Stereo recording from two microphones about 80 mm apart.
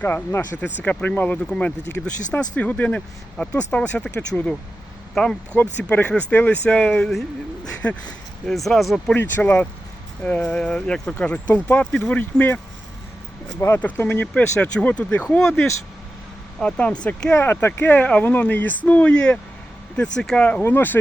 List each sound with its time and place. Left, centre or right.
0.0 s speech: left
8.4 s speech: centre
9.1 s speech: left; by 11.1 s centre
11.2 s speech: centre
13.7 s speech: left
17.3 s speech: left
20.6 s speech: left